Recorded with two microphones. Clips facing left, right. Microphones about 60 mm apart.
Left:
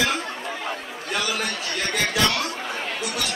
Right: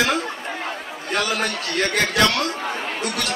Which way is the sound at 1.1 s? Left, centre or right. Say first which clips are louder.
Right 4 dB; right.